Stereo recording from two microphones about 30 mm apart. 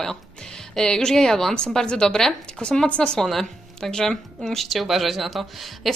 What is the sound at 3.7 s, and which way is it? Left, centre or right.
Speech, centre.